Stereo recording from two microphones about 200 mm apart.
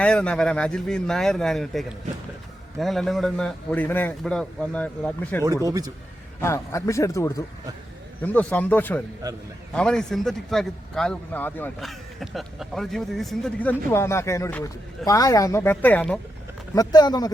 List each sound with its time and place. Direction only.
0.0 s a man's voice: 5° left (ahead or behind)
5.4 s speech: 15° right (ahead or behind)
6.4 s a man's voice: 15° left (ahead or behind)
16.7 s speech: 20° left (ahead or behind)